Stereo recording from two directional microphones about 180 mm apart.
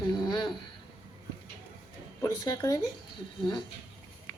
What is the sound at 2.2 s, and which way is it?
Speech, 20° left (ahead or behind).